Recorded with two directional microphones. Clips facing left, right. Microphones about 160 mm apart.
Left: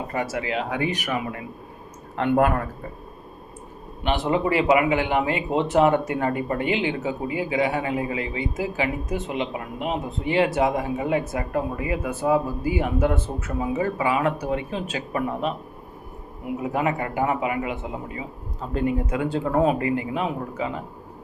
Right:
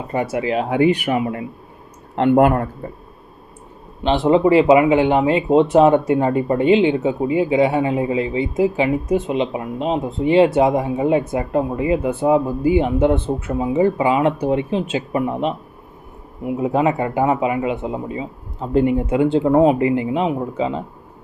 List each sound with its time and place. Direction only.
0.1 s speech: 25° right (ahead or behind)
4.0 s speech: 25° right (ahead or behind)
16.6 s speech: 25° right (ahead or behind)